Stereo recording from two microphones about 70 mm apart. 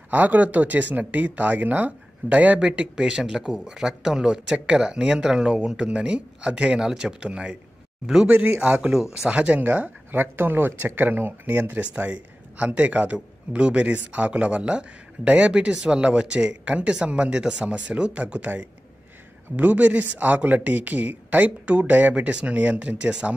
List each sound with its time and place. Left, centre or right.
0.1 s speech: right